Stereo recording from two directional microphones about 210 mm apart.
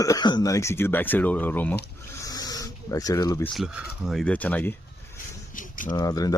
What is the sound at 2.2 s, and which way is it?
Snake, 20° left (ahead or behind).